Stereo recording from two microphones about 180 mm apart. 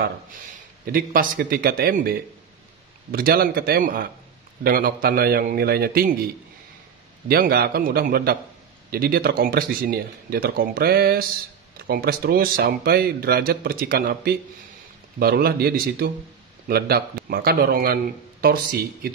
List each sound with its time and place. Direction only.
0.8 s a man's voice: 50° right (ahead or behind)
7.2 s a man's voice: 55° right (ahead or behind)